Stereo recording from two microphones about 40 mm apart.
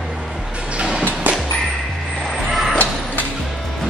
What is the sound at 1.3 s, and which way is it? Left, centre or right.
Music, right.